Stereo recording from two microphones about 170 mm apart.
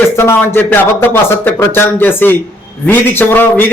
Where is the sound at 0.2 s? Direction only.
15° left (ahead or behind).